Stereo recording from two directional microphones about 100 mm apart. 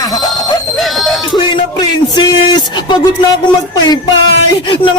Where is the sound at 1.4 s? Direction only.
50° left (ahead or behind).